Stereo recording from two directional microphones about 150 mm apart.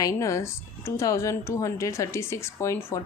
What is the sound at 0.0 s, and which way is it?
Speech, 20° left (ahead or behind).